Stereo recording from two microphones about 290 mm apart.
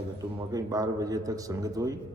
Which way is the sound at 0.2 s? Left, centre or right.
Centre.